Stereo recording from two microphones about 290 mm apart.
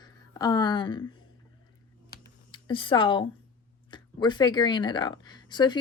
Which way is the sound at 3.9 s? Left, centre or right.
Centre.